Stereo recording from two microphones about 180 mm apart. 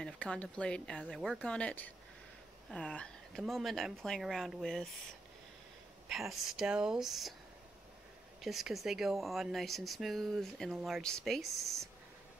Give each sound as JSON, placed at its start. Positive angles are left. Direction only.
{"t": 0.0, "sound": "speech", "side_deg": 5}
{"t": 6.0, "sound": "speech", "side_deg": 0}
{"t": 8.4, "sound": "speech", "side_deg": 0}
{"t": 11.6, "sound": "speech", "side_deg": -15}